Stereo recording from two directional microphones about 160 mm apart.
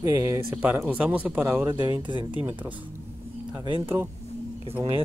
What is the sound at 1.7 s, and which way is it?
Speech, 30° right (ahead or behind).